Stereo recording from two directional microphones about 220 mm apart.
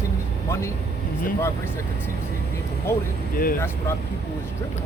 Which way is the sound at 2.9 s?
10° left (ahead or behind).